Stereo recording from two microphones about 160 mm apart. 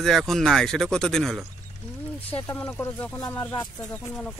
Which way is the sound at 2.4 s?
15° left (ahead or behind).